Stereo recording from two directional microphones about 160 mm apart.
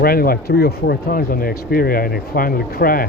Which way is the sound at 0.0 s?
70° left (ahead or behind).